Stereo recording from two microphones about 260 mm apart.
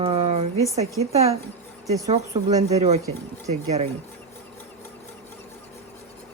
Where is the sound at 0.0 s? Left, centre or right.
Right.